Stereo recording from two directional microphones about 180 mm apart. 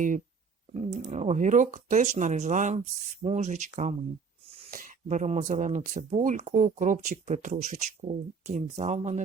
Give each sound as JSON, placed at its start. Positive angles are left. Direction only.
{"t": 0.7, "sound": "speech", "side_deg": -35}